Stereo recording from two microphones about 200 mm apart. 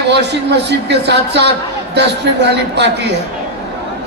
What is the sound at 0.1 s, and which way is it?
Speech, 60° right (ahead or behind).